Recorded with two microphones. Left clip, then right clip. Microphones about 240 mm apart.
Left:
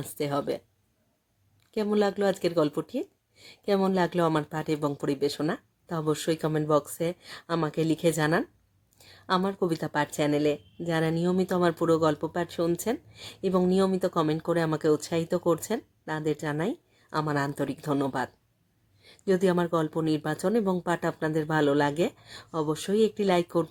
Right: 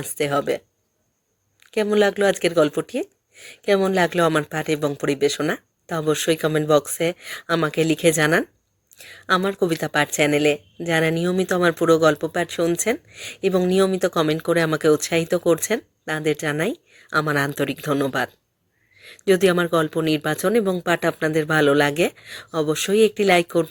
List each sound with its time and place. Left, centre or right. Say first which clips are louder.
0.0 s speech: right 8 dB; centre
1.7 s speech: right 8 dB; centre